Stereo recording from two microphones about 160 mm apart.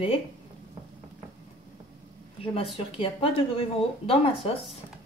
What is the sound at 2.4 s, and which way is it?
Speech, 35° left (ahead or behind).